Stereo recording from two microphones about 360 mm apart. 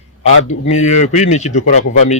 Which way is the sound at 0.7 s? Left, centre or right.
Centre.